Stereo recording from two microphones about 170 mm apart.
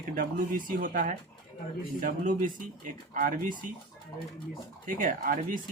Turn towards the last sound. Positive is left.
turn(degrees=-55)  # may be behind; listen again after turning